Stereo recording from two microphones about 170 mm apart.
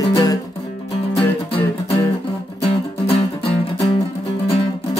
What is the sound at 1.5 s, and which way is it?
Music, 30° left (ahead or behind).